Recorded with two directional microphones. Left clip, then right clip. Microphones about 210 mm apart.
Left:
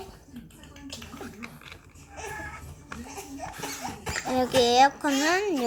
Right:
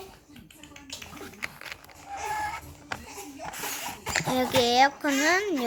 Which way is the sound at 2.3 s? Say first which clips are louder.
Right 7 dB; 20° right (ahead or behind).